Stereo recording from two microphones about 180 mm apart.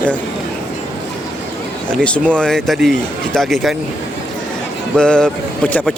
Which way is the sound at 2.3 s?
5° left (ahead or behind).